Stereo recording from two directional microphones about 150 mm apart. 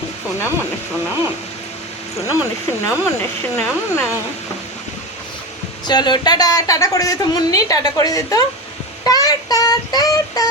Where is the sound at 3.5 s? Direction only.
10° left (ahead or behind).